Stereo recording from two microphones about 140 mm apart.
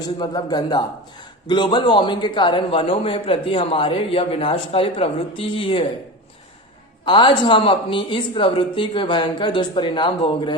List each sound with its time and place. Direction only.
0.2 s a man's voice: 30° left (ahead or behind)
7.0 s a man's voice: 35° left (ahead or behind)